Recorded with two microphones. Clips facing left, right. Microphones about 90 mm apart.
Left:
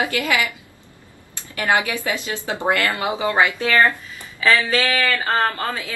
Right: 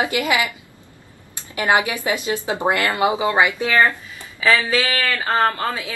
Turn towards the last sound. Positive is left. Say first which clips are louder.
# right 2 dB
turn(degrees=-15)  # may be behind; listen again after turning